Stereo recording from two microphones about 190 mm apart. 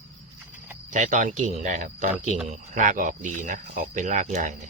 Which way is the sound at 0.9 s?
40° right (ahead or behind).